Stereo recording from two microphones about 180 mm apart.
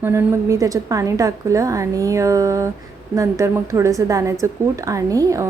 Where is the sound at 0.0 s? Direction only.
15° right (ahead or behind).